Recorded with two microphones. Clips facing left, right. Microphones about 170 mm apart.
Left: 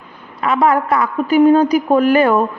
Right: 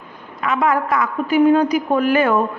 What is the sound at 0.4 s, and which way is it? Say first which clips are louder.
A woman's voice: left 4 dB; 35° left (ahead or behind).